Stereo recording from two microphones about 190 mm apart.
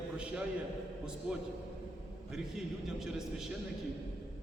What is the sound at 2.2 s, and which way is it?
A man's voice, centre (ahead or behind).